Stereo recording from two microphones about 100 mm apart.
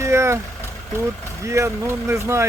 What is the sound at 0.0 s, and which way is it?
Vehicle, 30° right (ahead or behind).